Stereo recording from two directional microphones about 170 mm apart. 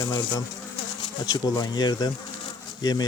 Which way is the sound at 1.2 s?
20° left (ahead or behind).